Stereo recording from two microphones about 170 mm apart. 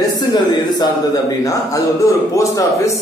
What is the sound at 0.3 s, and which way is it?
Speech, 25° left (ahead or behind).